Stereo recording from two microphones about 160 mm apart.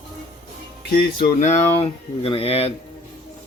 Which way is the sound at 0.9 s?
60° left (ahead or behind).